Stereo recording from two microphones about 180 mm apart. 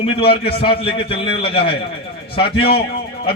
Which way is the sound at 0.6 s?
30° left (ahead or behind).